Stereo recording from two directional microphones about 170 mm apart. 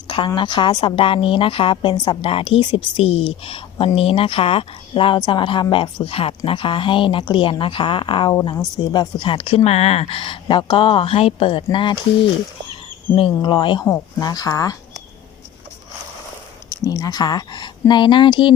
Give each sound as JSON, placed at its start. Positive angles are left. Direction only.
{"t": 0.1, "sound": "a woman's voice", "side_deg": 30}
{"t": 16.8, "sound": "speech", "side_deg": 20}